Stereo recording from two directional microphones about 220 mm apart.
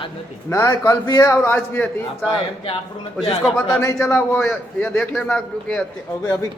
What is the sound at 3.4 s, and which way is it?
A man's voice, 5° left (ahead or behind).